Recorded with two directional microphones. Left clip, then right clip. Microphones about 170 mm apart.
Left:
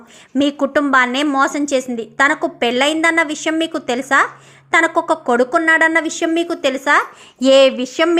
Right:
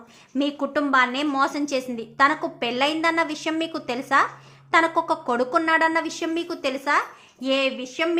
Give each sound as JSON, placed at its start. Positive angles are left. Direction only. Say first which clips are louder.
{"t": 0.3, "sound": "a woman's voice", "louder": "left 8 dB", "side_deg": 35}
{"t": 7.4, "sound": "speech", "louder": "left 13 dB", "side_deg": 55}